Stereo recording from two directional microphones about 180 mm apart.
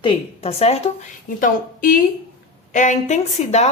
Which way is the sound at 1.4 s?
50° left (ahead or behind).